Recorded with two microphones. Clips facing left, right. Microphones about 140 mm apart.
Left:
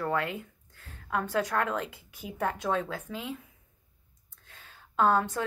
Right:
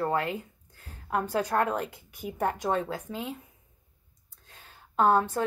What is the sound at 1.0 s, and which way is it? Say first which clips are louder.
A woman's voice: right 1 dB; 25° right (ahead or behind).